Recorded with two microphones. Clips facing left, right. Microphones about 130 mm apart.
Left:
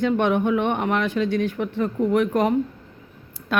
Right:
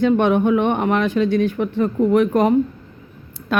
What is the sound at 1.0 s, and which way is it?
Speech, 40° right (ahead or behind).